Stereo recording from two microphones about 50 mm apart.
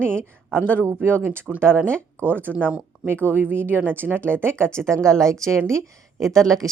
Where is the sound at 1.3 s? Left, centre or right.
Right.